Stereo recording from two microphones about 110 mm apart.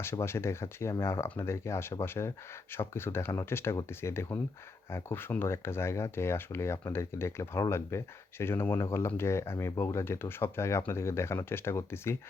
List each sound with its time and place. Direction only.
0.0 s speech: 20° left (ahead or behind)